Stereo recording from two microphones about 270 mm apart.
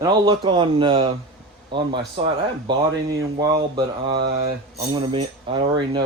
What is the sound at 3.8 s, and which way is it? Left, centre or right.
Speech, centre.